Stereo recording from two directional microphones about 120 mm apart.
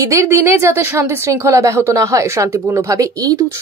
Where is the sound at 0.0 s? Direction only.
25° right (ahead or behind).